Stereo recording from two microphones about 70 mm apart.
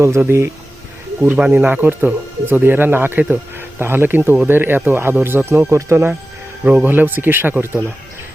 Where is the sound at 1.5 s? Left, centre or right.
Right.